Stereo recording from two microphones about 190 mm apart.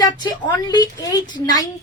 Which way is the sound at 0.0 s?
20° left (ahead or behind).